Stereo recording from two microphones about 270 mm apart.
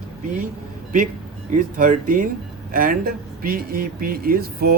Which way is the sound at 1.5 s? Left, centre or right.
Right.